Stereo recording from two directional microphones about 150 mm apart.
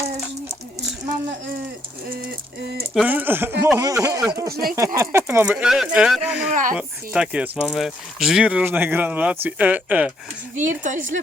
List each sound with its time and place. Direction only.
2.9 s speech: 10° right (ahead or behind)
5.5 s speech: 5° right (ahead or behind)
6.5 s a sound: 60° right (ahead or behind)
6.7 s speech: 5° right (ahead or behind)
10.5 s speech: 60° right (ahead or behind)